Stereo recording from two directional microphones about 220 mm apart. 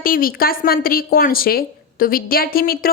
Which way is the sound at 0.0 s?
40° left (ahead or behind).